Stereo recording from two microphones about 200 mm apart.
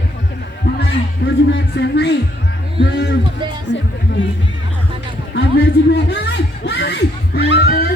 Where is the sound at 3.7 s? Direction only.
60° left (ahead or behind).